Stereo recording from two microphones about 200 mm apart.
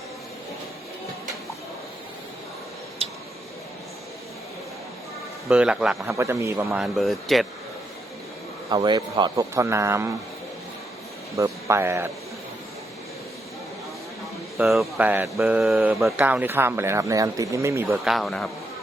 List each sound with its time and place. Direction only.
5.5 s speech: 5° right (ahead or behind)
6.1 s speech: 15° right (ahead or behind)
6.7 s speech: centre (ahead or behind)
8.7 s speech: 20° right (ahead or behind)
11.3 s speech: 15° right (ahead or behind)
14.6 s speech: centre (ahead or behind)